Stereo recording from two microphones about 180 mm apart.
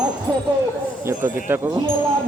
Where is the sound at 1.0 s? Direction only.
10° right (ahead or behind).